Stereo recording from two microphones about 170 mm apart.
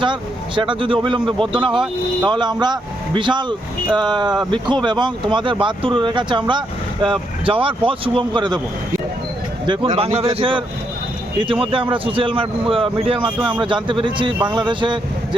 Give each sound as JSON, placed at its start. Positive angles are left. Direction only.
{"t": 0.0, "sound": "speech", "side_deg": -30}
{"t": 9.6, "sound": "speech", "side_deg": -35}
{"t": 11.3, "sound": "speech", "side_deg": -30}